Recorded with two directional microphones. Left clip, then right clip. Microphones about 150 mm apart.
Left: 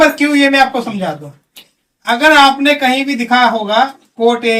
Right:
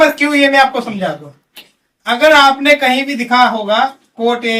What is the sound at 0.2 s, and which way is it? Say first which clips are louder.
Speech: even; 20° right (ahead or behind).